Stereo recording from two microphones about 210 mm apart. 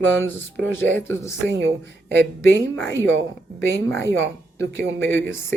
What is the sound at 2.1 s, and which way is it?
Speech, 55° right (ahead or behind).